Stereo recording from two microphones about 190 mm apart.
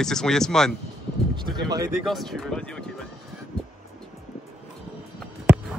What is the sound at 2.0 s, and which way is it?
Speech, centre (ahead or behind).